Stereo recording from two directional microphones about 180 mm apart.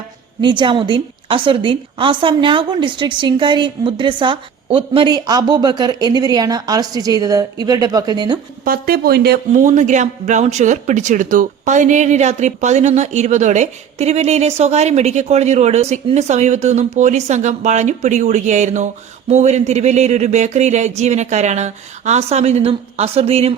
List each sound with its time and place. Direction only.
0.4 s a woman's voice: 25° right (ahead or behind)
8.6 s speech: 55° right (ahead or behind)
9.5 s speech: 45° right (ahead or behind)